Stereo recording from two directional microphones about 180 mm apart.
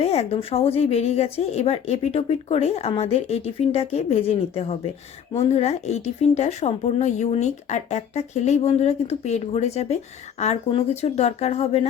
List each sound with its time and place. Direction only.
0.0 s speech: 35° left (ahead or behind)